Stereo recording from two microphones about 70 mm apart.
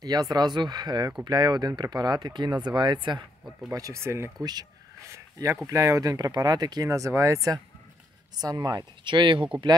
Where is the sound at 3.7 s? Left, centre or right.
Right.